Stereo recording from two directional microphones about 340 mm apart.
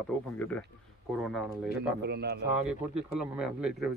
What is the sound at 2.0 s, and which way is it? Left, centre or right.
Speech, right.